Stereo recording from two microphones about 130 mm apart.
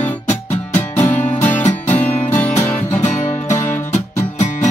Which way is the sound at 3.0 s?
70° left (ahead or behind).